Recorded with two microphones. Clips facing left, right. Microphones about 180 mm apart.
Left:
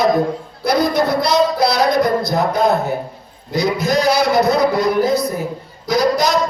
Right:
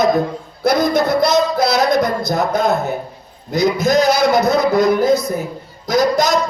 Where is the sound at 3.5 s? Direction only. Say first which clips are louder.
Right 3 dB; 45° right (ahead or behind).